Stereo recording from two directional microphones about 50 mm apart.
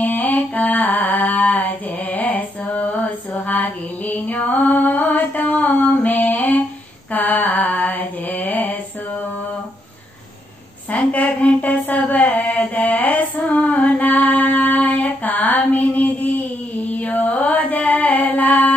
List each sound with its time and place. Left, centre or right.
0.0 s a sound: left
3.4 s music: left
7.1 s mantra: left
10.9 s mantra: left
17.5 s music: left